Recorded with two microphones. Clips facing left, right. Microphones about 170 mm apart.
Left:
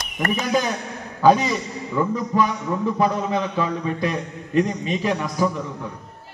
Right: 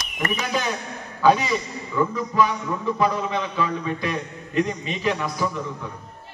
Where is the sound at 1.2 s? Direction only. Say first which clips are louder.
Left 2 dB; 40° left (ahead or behind).